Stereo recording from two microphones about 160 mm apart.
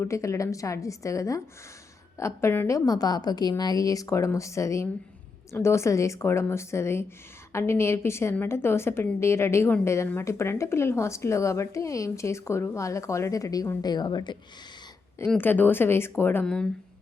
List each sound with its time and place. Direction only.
0.0 s a woman's voice: 20° left (ahead or behind)
15.4 s a woman's voice: 10° left (ahead or behind)